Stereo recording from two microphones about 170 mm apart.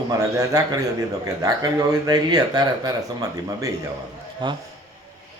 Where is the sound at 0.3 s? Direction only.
20° right (ahead or behind).